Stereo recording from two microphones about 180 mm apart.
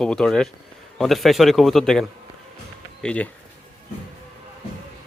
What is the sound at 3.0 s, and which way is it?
Speech, 10° left (ahead or behind).